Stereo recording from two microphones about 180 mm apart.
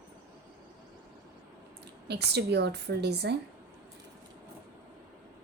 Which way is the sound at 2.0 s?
65° right (ahead or behind).